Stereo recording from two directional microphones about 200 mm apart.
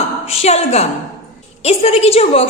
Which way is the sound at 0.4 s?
35° left (ahead or behind).